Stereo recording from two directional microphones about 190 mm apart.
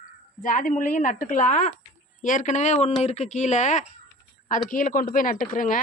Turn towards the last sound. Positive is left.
turn(degrees=45)  # may be behind; listen again after turning